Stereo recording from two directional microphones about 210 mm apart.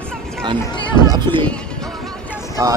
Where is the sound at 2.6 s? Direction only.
15° right (ahead or behind).